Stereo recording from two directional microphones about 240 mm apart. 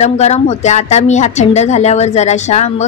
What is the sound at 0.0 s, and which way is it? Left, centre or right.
A woman's voice, left.